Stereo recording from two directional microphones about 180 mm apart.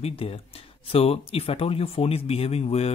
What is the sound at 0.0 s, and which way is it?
Speech, 30° left (ahead or behind).